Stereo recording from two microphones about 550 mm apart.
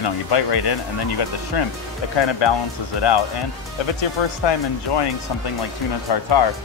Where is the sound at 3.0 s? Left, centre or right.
Left.